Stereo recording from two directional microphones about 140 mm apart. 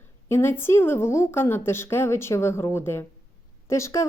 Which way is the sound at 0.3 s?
15° left (ahead or behind).